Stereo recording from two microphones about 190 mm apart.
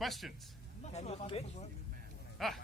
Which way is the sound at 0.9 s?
35° left (ahead or behind).